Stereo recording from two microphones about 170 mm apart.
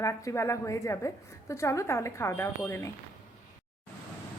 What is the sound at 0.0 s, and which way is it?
A woman's voice, 15° left (ahead or behind).